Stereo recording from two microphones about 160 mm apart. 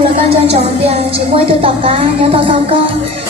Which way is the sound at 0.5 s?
40° right (ahead or behind).